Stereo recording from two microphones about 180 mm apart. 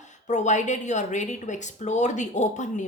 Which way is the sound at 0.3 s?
40° left (ahead or behind).